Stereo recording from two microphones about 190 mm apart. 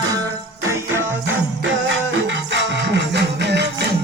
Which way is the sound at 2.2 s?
70° right (ahead or behind).